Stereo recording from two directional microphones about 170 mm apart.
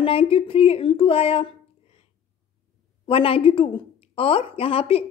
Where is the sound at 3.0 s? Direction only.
35° left (ahead or behind).